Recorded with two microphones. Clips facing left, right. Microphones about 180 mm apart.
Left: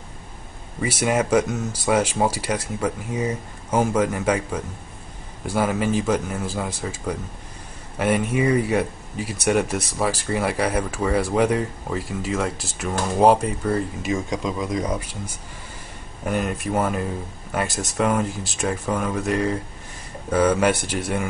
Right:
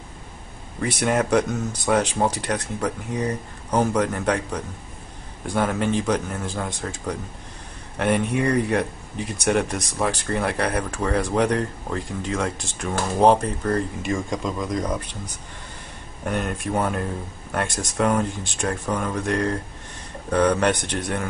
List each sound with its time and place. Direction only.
0.7 s speech: 5° left (ahead or behind)
16.3 s speech: centre (ahead or behind)